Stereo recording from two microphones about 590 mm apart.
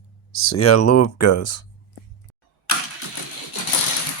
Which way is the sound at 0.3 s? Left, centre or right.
Left.